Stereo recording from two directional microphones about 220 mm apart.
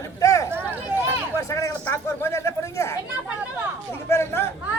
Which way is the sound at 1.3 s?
15° left (ahead or behind).